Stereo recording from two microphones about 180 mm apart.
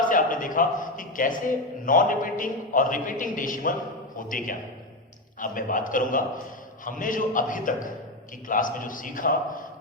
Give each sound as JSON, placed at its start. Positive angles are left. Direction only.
{"t": 0.1, "sound": "a man's voice", "side_deg": 50}